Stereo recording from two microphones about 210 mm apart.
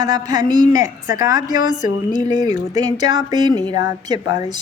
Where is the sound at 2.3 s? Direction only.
20° right (ahead or behind).